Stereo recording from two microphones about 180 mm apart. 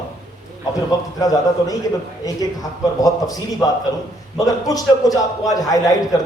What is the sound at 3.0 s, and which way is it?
A man's voice, 20° left (ahead or behind).